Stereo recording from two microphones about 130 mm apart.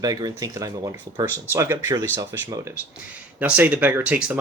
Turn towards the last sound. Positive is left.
turn(degrees=-10)  # may be behind; listen again after turning